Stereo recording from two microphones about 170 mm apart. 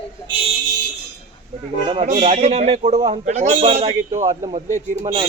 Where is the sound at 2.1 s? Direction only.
45° right (ahead or behind).